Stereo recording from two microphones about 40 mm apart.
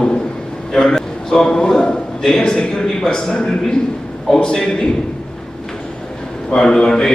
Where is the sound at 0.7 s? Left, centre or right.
Centre.